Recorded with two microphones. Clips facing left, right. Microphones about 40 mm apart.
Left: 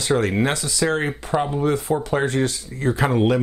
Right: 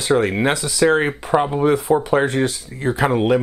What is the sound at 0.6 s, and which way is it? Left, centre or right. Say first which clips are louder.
Speech: right 5 dB; right.